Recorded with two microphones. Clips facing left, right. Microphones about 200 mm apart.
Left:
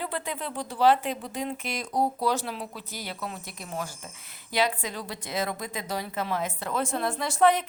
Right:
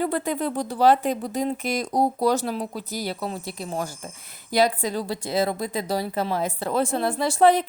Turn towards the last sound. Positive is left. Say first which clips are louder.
# right 4 dB
turn(degrees=-30)  # may be behind; listen again after turning